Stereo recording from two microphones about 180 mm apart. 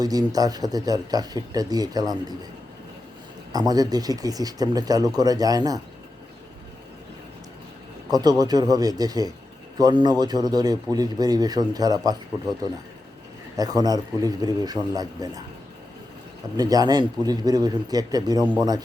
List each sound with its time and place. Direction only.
0.0 s speech: 20° right (ahead or behind)
3.5 s speech: 20° right (ahead or behind)
8.1 s speech: 20° right (ahead or behind)
13.6 s speech: 20° right (ahead or behind)
16.6 s speech: 20° right (ahead or behind)